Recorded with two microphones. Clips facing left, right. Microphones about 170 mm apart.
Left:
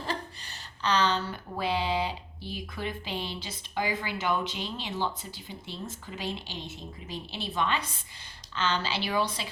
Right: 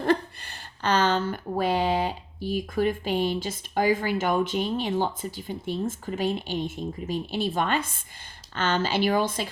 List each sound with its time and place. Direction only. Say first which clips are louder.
0.0 s speech: right 11 dB; 55° right (ahead or behind)